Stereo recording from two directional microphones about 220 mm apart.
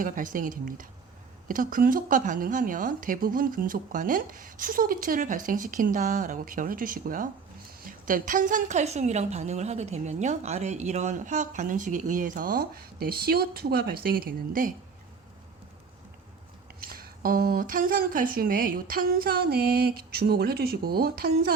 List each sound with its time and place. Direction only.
0.0 s a woman's voice: 35° right (ahead or behind)
16.8 s a woman's voice: 40° right (ahead or behind)